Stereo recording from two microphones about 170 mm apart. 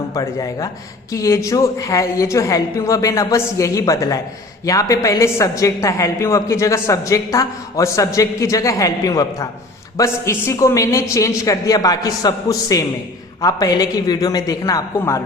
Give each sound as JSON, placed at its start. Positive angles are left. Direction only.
{"t": 0.1, "sound": "a woman's voice", "side_deg": 20}